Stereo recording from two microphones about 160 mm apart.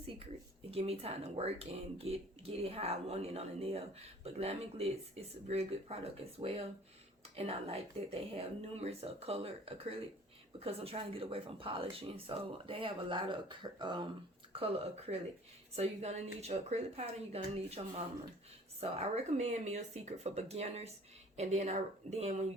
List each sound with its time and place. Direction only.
0.7 s speech: 40° right (ahead or behind)